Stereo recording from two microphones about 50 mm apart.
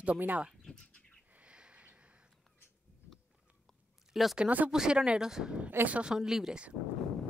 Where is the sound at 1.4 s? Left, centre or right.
Right.